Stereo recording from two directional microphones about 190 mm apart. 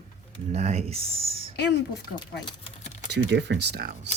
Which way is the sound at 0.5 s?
35° right (ahead or behind).